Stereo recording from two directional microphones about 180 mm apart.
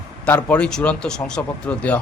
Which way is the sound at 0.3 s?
10° left (ahead or behind).